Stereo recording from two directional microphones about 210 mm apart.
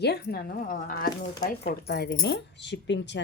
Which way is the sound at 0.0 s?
50° left (ahead or behind).